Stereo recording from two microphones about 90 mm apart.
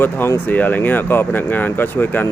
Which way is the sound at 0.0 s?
25° left (ahead or behind).